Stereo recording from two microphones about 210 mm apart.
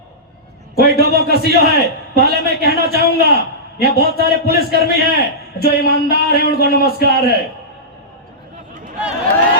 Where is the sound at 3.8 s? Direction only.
50° left (ahead or behind).